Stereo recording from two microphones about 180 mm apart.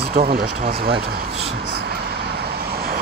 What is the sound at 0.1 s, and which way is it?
Speech, 55° right (ahead or behind).